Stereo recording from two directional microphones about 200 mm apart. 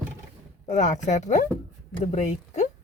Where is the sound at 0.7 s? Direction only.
35° left (ahead or behind).